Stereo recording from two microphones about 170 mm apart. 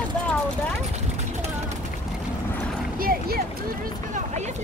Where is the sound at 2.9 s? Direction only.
60° right (ahead or behind).